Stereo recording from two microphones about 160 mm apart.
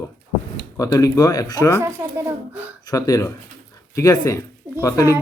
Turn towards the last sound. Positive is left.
turn(degrees=20)  # may be behind; listen again after turning